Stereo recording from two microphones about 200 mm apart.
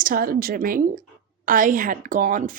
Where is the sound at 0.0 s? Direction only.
45° right (ahead or behind).